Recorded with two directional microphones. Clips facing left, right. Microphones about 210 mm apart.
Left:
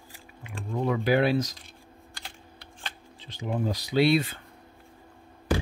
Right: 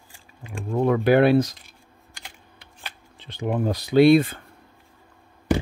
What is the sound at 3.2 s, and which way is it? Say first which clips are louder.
Speech: right 5 dB; 60° right (ahead or behind).